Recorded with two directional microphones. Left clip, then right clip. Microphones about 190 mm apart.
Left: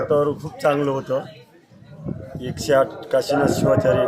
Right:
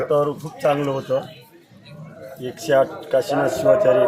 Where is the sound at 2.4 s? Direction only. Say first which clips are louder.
Even; 10° left (ahead or behind).